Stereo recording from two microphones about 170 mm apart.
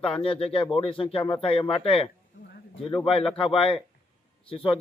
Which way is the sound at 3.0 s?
35° left (ahead or behind).